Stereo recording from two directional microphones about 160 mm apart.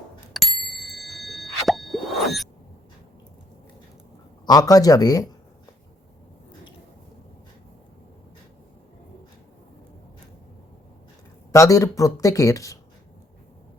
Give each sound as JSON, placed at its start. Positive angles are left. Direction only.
{"t": 0.3, "sound": "bicycle bell", "side_deg": 0}
{"t": 4.4, "sound": "speech", "side_deg": 25}
{"t": 11.5, "sound": "speech", "side_deg": 20}